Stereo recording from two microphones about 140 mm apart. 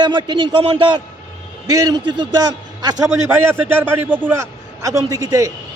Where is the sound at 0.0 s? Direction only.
35° right (ahead or behind).